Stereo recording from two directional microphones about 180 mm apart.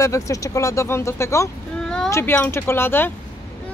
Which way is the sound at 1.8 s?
5° left (ahead or behind).